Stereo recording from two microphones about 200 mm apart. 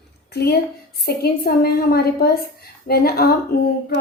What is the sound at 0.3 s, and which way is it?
A woman's voice, 55° left (ahead or behind).